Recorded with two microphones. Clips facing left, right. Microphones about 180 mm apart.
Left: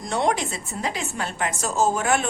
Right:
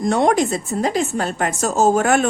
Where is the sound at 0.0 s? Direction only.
50° right (ahead or behind).